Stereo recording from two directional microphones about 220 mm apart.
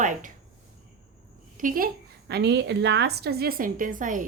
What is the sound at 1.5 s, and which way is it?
A woman's voice, 40° right (ahead or behind).